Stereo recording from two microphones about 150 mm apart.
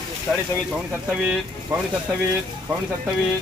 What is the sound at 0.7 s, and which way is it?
Speech, 5° right (ahead or behind).